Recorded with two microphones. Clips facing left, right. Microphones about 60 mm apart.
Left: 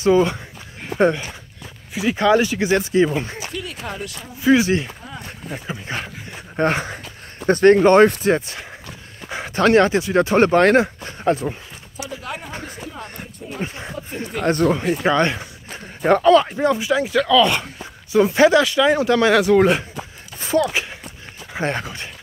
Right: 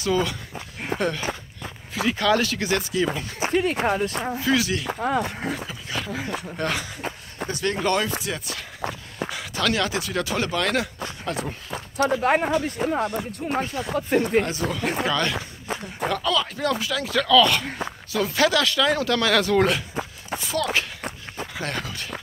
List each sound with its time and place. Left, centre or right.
0.0 s speech: left
3.3 s a sound: right
3.8 s speech: right
4.4 s speech: left
4.8 s speech: right
5.7 s speech: left
8.4 s speech: left
12.0 s speech: right
14.4 s speech: left
15.0 s speech: left
16.4 s speech: left
20.3 s a sound: left
21.5 s speech: left